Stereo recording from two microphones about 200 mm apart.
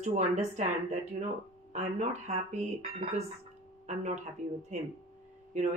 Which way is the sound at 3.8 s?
35° right (ahead or behind).